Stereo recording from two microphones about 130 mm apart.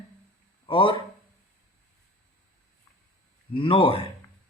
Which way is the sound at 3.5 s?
40° left (ahead or behind).